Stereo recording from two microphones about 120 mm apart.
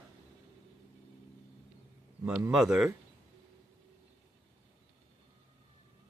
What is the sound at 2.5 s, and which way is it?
Speech, 5° right (ahead or behind).